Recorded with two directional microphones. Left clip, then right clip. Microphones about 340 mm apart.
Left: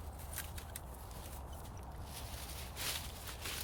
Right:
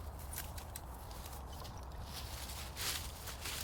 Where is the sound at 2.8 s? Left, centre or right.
Centre.